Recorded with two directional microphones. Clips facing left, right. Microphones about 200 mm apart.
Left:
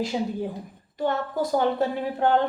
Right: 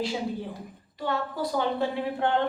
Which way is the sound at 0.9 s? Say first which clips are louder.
Left 4 dB; 45° left (ahead or behind).